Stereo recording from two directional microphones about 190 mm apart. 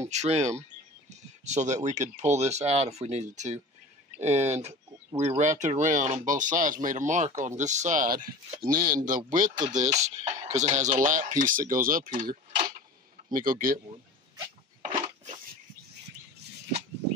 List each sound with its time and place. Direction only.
0.1 s speech: 35° right (ahead or behind)
4.6 s chicken: 35° right (ahead or behind)
5.4 s speech: 40° right (ahead or behind)